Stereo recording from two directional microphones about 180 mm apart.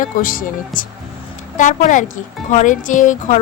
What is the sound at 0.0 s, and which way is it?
Speech, 50° left (ahead or behind).